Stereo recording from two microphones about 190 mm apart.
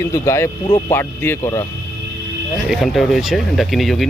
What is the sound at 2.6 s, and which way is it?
Speech, centre (ahead or behind).